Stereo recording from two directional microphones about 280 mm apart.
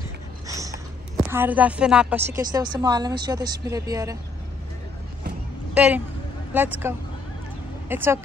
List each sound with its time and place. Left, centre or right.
0.5 s a sound: centre
1.1 s a woman's voice: centre
5.8 s a woman's voice: centre